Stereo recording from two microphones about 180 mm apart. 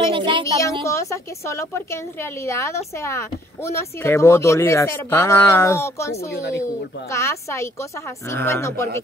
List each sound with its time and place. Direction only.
0.0 s a sound: 25° right (ahead or behind)
0.8 s speech: 15° left (ahead or behind)
6.3 s speech: 75° left (ahead or behind)
6.6 s speech: 15° left (ahead or behind)